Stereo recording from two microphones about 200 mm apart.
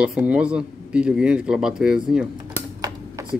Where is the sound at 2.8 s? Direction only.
15° right (ahead or behind).